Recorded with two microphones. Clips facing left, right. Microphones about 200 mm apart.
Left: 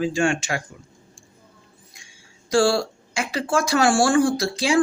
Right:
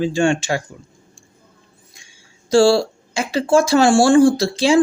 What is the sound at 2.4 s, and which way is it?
Speech, 30° right (ahead or behind).